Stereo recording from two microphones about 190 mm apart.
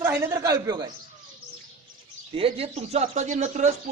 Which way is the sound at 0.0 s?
10° right (ahead or behind).